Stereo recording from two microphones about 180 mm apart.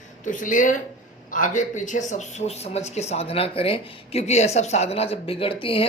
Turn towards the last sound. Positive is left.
turn(degrees=30)  # may be behind; listen again after turning